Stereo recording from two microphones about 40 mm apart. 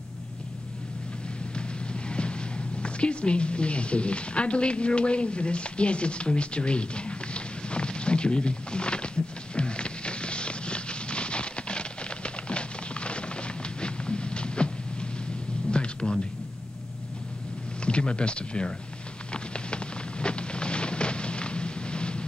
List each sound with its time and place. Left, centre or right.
1.5 s music: left
17.8 s speech: left
19.3 s a sound: left